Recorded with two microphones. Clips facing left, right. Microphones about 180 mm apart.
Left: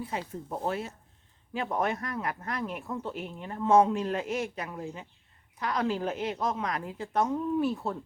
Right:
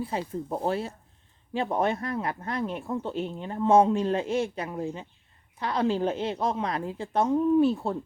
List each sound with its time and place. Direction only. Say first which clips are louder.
0.0 s speech: right 5 dB; 30° right (ahead or behind)